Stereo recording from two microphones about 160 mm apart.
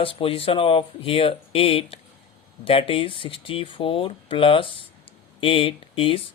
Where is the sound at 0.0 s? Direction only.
35° left (ahead or behind).